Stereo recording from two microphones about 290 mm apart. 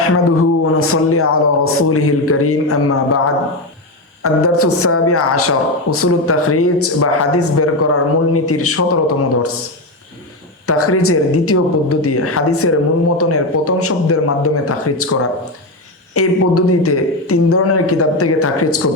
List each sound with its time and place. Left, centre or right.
0.0 s a woman's voice: left
10.7 s a woman's voice: left